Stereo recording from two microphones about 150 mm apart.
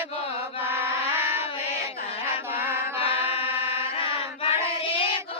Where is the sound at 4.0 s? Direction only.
40° left (ahead or behind).